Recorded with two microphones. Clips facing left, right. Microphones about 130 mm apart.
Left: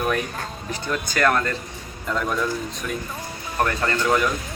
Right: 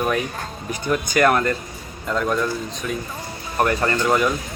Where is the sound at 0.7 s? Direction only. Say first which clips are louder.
Right 5 dB; 15° right (ahead or behind).